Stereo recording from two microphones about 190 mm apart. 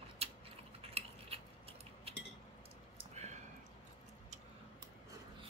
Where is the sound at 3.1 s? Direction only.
35° right (ahead or behind).